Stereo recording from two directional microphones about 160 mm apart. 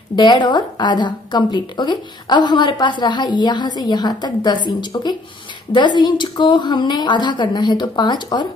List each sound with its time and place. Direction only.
0.1 s a woman's voice: 25° left (ahead or behind)